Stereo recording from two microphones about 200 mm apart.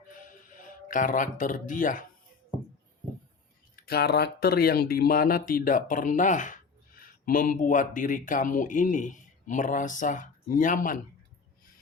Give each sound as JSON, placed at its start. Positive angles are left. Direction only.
{"t": 0.1, "sound": "music", "side_deg": 40}
{"t": 3.8, "sound": "speech", "side_deg": 50}